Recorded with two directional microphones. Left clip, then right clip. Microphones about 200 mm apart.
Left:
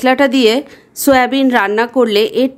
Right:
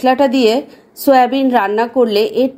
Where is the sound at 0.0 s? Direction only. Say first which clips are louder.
Left 1 dB; 25° left (ahead or behind).